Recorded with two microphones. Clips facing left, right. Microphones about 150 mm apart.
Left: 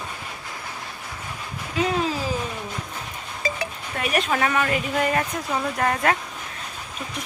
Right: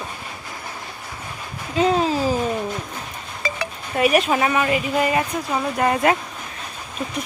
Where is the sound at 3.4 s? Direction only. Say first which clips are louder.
Even; 70° right (ahead or behind).